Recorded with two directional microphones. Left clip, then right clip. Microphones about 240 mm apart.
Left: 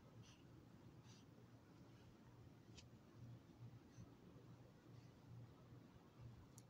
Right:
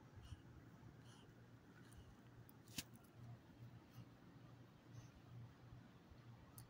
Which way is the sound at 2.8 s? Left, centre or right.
Right.